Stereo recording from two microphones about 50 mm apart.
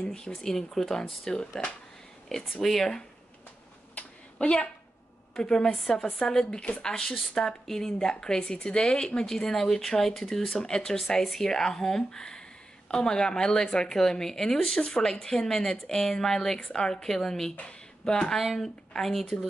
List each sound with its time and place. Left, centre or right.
0.0 s speech: centre
3.9 s a sound: left
5.3 s a woman's voice: centre
18.4 s a woman's voice: centre